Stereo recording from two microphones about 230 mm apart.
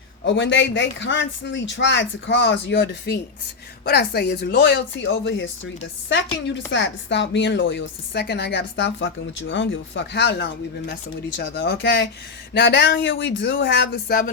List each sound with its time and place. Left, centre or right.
0.3 s a woman's voice: left
6.7 s a woman's voice: left